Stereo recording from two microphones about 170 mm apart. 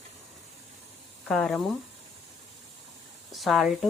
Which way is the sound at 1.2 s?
Centre (ahead or behind).